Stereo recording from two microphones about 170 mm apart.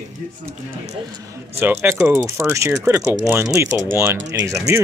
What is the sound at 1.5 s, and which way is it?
Speech, 10° right (ahead or behind).